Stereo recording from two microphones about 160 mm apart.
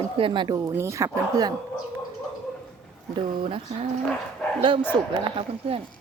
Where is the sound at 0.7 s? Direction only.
15° right (ahead or behind).